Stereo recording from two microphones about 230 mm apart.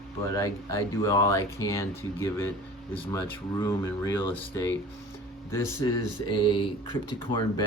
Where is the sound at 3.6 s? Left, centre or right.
Centre.